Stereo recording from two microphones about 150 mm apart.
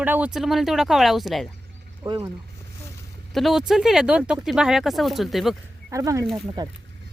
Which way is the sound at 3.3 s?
Centre (ahead or behind).